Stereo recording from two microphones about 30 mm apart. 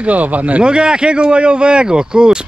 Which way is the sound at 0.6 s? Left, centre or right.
Right.